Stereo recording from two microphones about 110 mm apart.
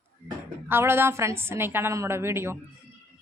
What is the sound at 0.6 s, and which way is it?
A woman's voice, 20° right (ahead or behind).